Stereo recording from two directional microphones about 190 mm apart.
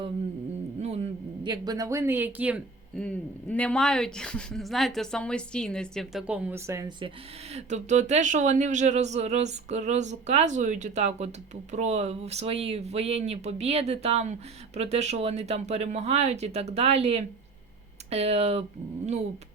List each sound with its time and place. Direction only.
0.8 s a sound: 35° right (ahead or behind)
1.5 s speech: 20° right (ahead or behind)
2.9 s speech: 5° left (ahead or behind); by 6.9 s 15° right (ahead or behind)
7.5 s speech: 40° right (ahead or behind)